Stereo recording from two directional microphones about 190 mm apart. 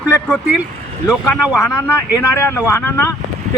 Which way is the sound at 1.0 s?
5° right (ahead or behind).